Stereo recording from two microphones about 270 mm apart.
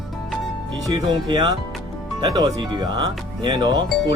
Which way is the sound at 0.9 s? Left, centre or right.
Centre.